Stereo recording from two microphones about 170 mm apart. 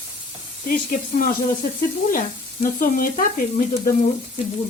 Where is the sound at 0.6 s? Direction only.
55° left (ahead or behind).